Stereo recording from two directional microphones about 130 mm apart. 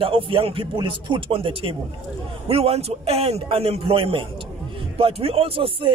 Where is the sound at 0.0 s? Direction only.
45° right (ahead or behind).